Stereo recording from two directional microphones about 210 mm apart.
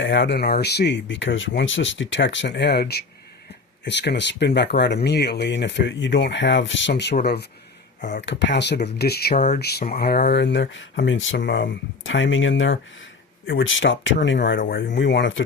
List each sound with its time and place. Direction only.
0.0 s speech: 60° left (ahead or behind); by 9.6 s 35° left (ahead or behind)
9.6 s speech: 50° left (ahead or behind)